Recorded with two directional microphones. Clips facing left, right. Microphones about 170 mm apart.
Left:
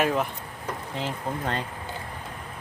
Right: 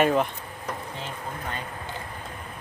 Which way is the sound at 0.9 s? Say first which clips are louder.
Left 5 dB; 90° left.